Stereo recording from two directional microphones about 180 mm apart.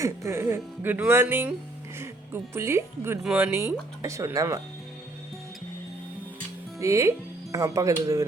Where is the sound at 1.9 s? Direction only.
15° right (ahead or behind).